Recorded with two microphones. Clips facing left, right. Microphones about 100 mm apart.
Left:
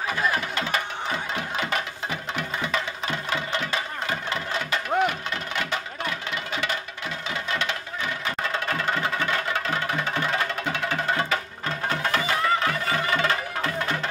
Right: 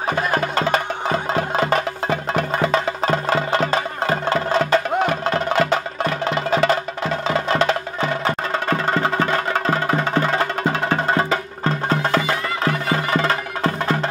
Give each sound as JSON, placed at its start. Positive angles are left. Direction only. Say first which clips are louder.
{"t": 0.1, "sound": "music", "louder": "right 7 dB", "side_deg": -40}